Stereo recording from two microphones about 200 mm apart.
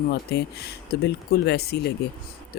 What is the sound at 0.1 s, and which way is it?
Speech, 55° left (ahead or behind).